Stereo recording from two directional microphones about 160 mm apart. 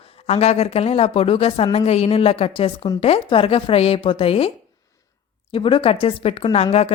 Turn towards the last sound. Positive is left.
turn(degrees=35)  # may be behind; listen again after turning